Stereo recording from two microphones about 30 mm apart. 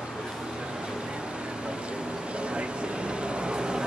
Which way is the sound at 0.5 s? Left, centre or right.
Right.